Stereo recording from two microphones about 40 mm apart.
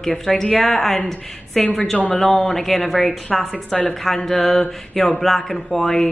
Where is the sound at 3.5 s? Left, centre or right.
Left.